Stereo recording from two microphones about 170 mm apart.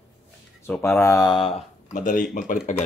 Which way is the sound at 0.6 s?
10° left (ahead or behind).